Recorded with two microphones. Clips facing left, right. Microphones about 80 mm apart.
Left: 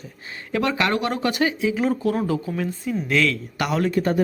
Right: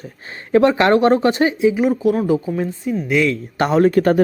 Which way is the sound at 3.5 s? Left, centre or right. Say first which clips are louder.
Right 10 dB; right.